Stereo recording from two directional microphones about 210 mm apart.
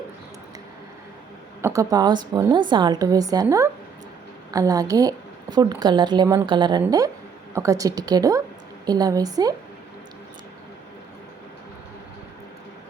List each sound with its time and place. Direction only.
1.6 s a woman's voice: 15° right (ahead or behind)